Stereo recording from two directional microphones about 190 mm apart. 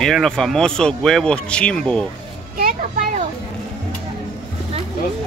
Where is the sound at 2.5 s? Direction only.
45° right (ahead or behind).